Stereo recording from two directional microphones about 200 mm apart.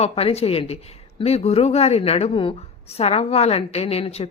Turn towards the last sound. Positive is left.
turn(degrees=30)  # may be behind; listen again after turning